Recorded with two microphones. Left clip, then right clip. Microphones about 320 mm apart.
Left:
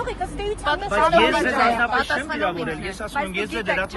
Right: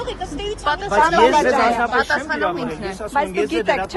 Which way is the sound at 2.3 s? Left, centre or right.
Centre.